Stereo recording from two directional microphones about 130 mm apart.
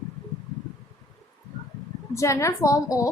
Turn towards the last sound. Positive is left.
turn(degrees=25)  # may be behind; listen again after turning